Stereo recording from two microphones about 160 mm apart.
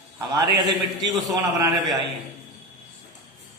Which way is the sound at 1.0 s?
Centre (ahead or behind).